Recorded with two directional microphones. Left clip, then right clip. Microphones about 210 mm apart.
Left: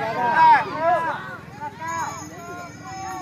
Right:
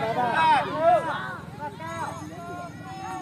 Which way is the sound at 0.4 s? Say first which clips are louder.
Left 7 dB; 35° right (ahead or behind).